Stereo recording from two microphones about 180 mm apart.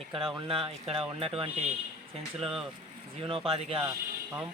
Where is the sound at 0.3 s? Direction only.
30° right (ahead or behind).